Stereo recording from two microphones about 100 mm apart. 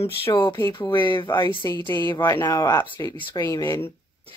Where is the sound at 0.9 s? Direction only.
55° left (ahead or behind).